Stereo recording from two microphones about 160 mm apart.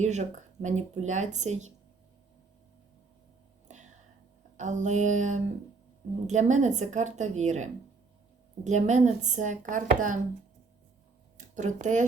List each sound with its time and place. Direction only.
0.0 s speech: 45° right (ahead or behind)
3.7 s whispering: 50° right (ahead or behind)
4.5 s speech: 50° right (ahead or behind)
11.3 s speech: 50° right (ahead or behind)